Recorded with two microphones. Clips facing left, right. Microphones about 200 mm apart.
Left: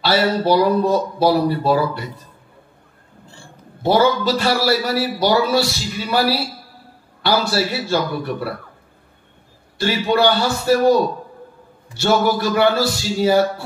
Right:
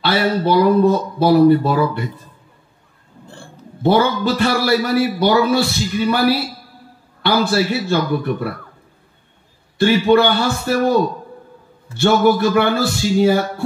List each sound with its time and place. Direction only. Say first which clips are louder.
0.0 s a man's voice: even; 50° right (ahead or behind)
3.3 s a man's voice: right 5 dB; 55° right (ahead or behind)
9.8 s a man's voice: right 5 dB; 50° right (ahead or behind)